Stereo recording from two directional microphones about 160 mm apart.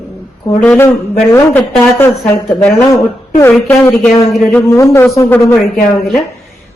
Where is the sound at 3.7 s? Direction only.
10° left (ahead or behind).